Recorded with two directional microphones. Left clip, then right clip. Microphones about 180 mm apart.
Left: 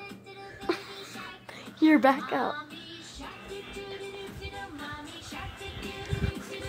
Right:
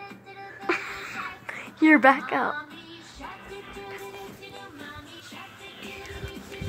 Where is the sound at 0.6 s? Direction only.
Centre (ahead or behind).